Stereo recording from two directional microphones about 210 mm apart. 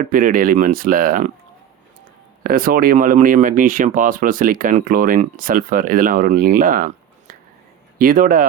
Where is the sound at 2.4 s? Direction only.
45° right (ahead or behind).